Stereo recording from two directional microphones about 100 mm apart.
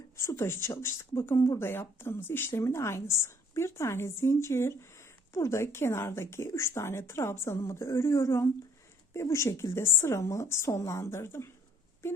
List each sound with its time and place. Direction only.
0.2 s speech: 25° left (ahead or behind)